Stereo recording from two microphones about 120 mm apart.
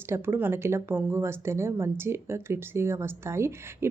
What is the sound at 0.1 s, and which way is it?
Speech, 20° right (ahead or behind).